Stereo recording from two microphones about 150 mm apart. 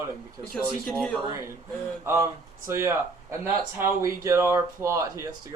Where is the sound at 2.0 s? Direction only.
15° right (ahead or behind).